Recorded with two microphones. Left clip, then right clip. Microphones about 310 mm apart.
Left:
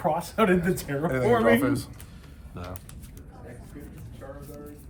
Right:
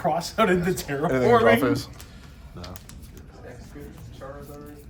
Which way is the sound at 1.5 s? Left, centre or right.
Right.